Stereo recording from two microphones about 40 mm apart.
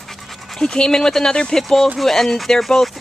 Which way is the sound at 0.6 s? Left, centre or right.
Centre.